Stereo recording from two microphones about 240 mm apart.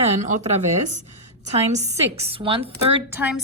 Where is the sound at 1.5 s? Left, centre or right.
Right.